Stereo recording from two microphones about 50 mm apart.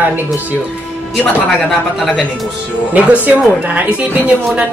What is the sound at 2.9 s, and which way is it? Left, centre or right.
Speech, right.